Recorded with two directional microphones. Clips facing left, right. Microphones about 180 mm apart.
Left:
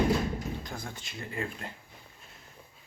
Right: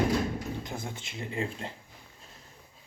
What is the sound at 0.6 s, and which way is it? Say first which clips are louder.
Speech: right 3 dB; 25° right (ahead or behind).